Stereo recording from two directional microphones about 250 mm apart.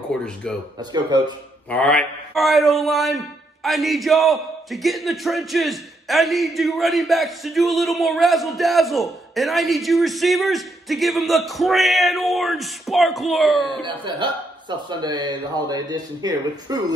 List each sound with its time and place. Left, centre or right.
0.4 s speech: centre
0.7 s speech: centre
1.7 s speech: centre
13.8 s speech: centre